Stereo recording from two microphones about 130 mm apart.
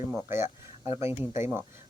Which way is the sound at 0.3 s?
20° right (ahead or behind).